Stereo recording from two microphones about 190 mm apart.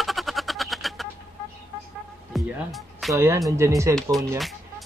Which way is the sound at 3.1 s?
15° right (ahead or behind).